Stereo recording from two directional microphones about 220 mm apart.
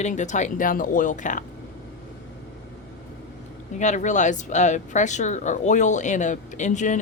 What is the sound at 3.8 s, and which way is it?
Speech, 35° left (ahead or behind).